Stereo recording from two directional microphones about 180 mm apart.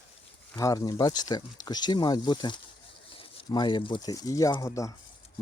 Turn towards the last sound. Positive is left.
turn(degrees=15)  # may be behind; listen again after turning